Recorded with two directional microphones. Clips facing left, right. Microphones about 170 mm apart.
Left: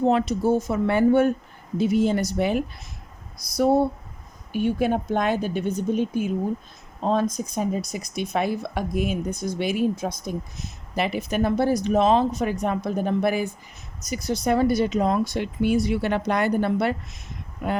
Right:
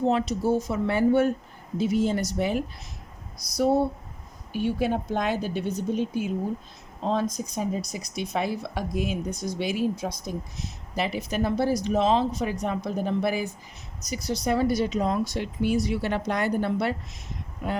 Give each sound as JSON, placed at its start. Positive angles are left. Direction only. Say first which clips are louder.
{"t": 0.0, "sound": "speech", "louder": "left 3 dB", "side_deg": 55}